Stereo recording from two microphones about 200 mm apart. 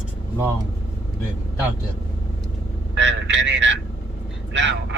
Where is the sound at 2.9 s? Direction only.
65° right (ahead or behind).